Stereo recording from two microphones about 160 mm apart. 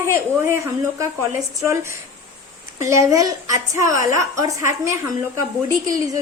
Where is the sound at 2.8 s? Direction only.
20° right (ahead or behind).